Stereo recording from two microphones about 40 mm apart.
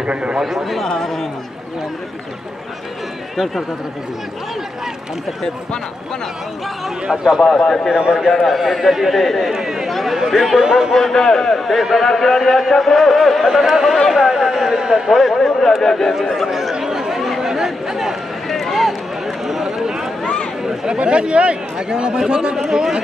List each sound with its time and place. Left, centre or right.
0.0 s speech: right
0.8 s a man's voice: centre
7.3 s a man's voice: centre
7.9 s speech: centre
8.5 s a man's voice: centre
11.0 s a man's voice: centre
13.5 s speech: centre
15.0 s a man's voice: centre
16.1 s speech: centre
16.7 s chatter: centre
18.5 s run: centre
20.6 s speech: centre
22.7 s speech: centre